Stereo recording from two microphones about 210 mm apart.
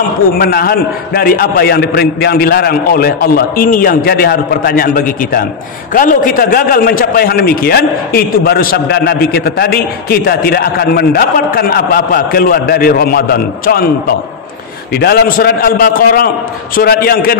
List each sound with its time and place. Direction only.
0.4 s a man's voice: 45° left (ahead or behind)
15.0 s a man's voice: 45° left (ahead or behind)